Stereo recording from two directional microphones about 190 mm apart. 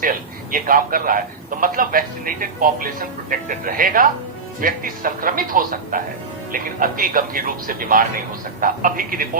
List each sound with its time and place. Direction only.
0.0 s a man's voice: 45° right (ahead or behind)